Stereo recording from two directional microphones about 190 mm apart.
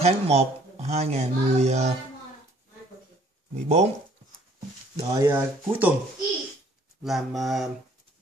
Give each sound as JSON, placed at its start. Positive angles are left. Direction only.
{"t": 0.0, "sound": "speech", "side_deg": -35}
{"t": 3.5, "sound": "speech", "side_deg": -35}
{"t": 4.9, "sound": "speech", "side_deg": -15}
{"t": 7.0, "sound": "speech", "side_deg": 0}